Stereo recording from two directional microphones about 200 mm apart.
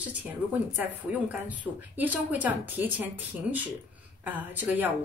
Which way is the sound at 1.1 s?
5° right (ahead or behind).